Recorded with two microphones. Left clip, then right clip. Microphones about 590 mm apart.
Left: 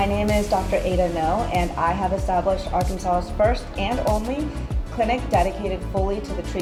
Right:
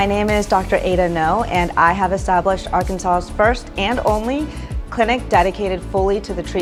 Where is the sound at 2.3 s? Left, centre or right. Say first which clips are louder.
Right 5 dB; right.